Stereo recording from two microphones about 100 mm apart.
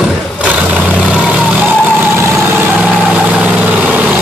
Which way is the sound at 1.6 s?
20° right (ahead or behind).